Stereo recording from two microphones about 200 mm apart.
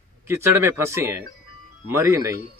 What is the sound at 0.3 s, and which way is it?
Speech, 15° right (ahead or behind).